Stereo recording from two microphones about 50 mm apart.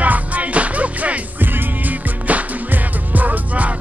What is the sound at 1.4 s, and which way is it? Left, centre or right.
Music, right.